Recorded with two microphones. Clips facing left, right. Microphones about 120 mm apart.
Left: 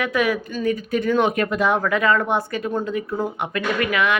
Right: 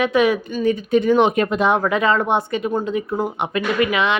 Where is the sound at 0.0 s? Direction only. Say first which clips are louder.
Right 4 dB; 25° right (ahead or behind).